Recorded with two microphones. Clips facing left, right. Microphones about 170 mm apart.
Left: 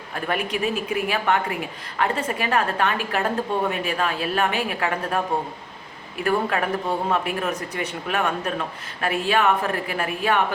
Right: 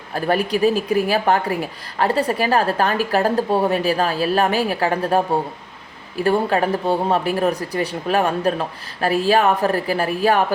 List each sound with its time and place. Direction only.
0.1 s speech: 35° right (ahead or behind)